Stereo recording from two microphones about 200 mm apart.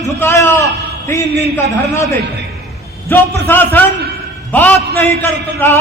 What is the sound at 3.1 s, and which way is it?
Speech, 10° left (ahead or behind).